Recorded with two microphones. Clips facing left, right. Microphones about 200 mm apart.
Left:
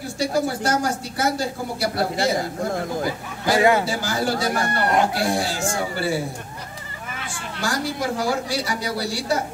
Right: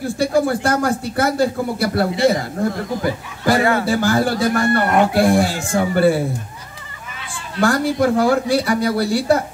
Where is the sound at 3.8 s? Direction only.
55° right (ahead or behind).